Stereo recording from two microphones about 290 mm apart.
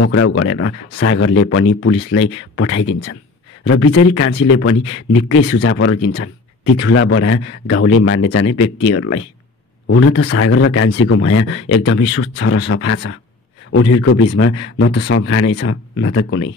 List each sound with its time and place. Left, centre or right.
0.0 s speech: left